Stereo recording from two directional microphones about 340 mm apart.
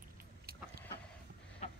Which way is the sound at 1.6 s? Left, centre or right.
Centre.